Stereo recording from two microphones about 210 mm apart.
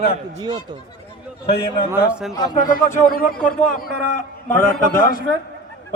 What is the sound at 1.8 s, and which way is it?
Speech, 5° right (ahead or behind).